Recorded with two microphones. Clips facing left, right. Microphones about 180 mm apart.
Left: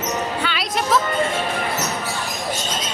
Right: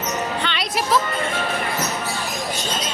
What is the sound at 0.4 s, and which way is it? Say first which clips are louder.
Music: left 1 dB; centre (ahead or behind).